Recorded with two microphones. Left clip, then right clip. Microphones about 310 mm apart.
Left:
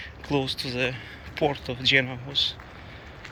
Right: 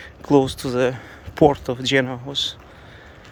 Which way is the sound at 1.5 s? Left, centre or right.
Centre.